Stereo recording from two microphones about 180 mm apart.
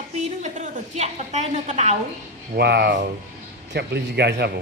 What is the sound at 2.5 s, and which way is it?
Speech, 65° right (ahead or behind).